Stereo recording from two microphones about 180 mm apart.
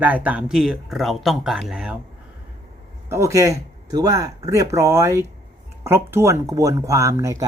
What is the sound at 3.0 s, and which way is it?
Speech, 15° right (ahead or behind).